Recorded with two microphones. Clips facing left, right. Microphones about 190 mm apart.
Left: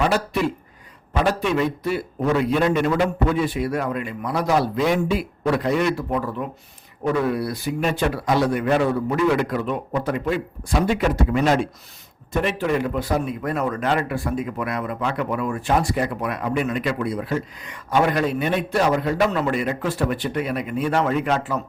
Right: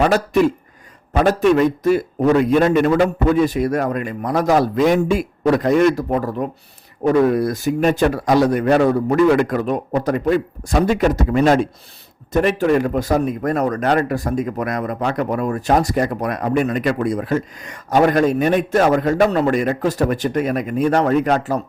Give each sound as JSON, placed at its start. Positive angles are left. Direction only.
{"t": 0.0, "sound": "speech", "side_deg": -45}